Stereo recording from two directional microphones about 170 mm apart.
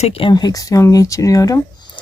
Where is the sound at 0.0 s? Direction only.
35° left (ahead or behind).